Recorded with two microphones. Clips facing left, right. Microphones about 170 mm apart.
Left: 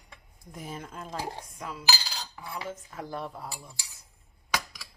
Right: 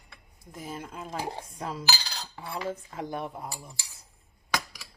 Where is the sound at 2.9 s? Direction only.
20° right (ahead or behind).